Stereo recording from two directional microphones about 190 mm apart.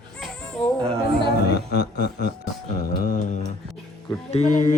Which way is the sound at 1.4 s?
60° left (ahead or behind).